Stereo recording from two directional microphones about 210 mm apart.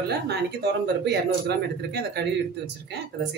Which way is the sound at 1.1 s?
50° right (ahead or behind).